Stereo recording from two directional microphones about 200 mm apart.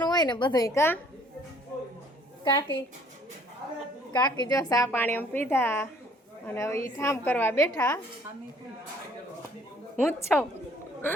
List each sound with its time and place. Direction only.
0.0 s a woman's voice: 20° left (ahead or behind)
2.4 s a woman's voice: 20° left (ahead or behind)
4.1 s a woman's voice: 20° left (ahead or behind)
10.0 s a woman's voice: 10° left (ahead or behind)